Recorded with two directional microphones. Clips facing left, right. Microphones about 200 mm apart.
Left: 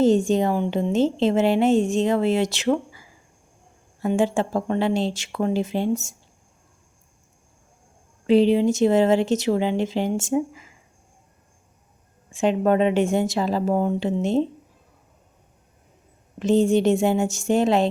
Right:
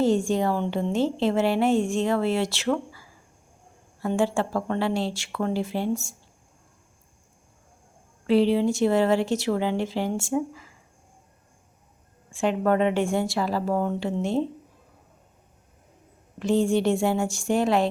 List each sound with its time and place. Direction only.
0.0 s a woman's voice: 20° left (ahead or behind)
8.3 s a woman's voice: 20° left (ahead or behind)
12.3 s a woman's voice: 20° left (ahead or behind)
16.4 s a woman's voice: 20° left (ahead or behind)